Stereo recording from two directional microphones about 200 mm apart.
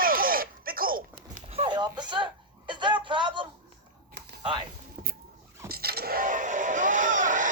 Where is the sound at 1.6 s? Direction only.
25° right (ahead or behind).